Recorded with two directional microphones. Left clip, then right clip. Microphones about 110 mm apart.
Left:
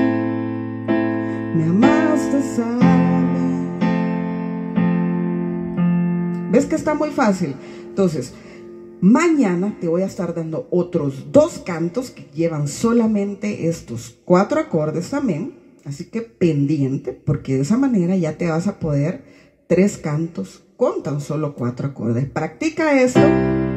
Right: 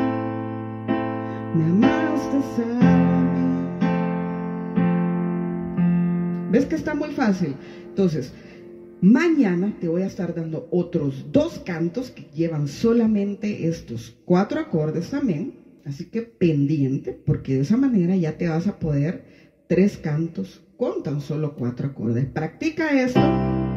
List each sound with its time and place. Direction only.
0.0 s music: 15° right (ahead or behind)
7.9 s speech: 20° right (ahead or behind)
11.3 s speech: 20° right (ahead or behind)